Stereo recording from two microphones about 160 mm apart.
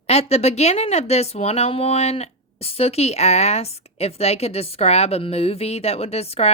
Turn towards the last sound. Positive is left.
turn(degrees=40)  # may be behind; listen again after turning